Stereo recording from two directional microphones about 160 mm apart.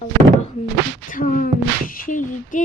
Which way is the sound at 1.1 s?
60° left (ahead or behind).